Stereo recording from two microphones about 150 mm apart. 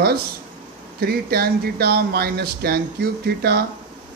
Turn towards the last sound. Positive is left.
turn(degrees=-90)